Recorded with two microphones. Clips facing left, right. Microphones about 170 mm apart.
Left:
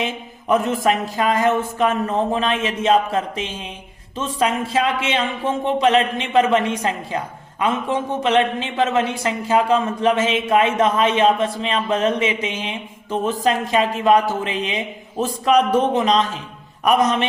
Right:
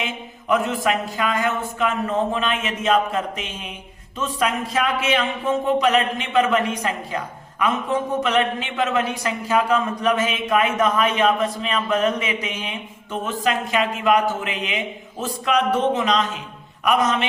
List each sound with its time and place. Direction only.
0.0 s a man's voice: 40° left (ahead or behind)